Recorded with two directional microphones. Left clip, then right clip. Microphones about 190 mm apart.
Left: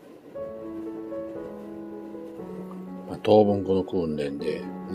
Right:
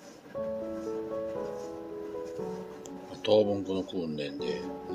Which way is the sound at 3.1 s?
55° left (ahead or behind).